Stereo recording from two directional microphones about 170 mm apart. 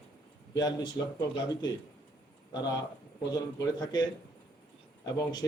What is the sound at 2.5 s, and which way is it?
A man's voice, 25° left (ahead or behind).